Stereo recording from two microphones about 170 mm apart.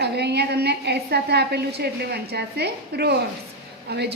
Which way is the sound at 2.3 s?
70° right (ahead or behind).